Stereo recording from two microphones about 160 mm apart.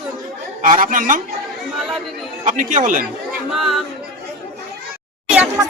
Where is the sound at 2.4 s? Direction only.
55° right (ahead or behind).